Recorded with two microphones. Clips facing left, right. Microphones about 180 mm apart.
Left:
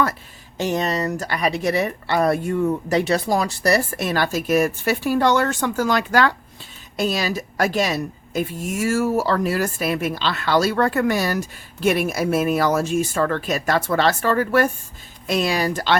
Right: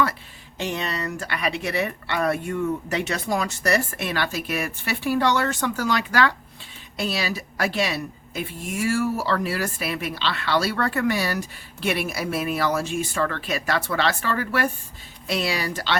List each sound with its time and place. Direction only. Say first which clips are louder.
0.5 s a woman's voice: left 6 dB; 40° left (ahead or behind)